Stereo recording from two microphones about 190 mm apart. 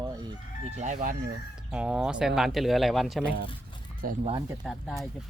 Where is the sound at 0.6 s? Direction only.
40° right (ahead or behind).